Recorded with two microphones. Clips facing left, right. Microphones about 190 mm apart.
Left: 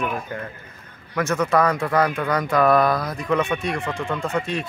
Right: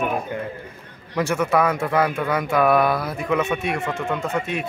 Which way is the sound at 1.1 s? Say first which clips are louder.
Even; 10° right (ahead or behind).